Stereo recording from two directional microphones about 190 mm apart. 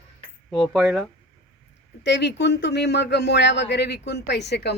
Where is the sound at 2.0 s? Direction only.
65° left (ahead or behind).